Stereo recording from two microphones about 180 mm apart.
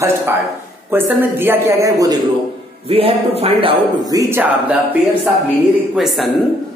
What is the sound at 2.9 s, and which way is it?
A woman's voice, 30° right (ahead or behind).